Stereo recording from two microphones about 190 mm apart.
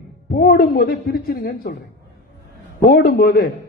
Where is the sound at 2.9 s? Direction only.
50° left (ahead or behind).